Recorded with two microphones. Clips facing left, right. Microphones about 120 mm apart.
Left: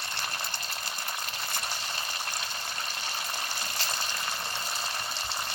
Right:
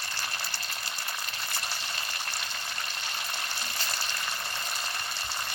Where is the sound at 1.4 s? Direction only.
25° left (ahead or behind).